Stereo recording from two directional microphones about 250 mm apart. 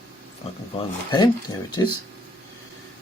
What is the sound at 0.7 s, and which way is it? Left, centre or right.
Speech, centre.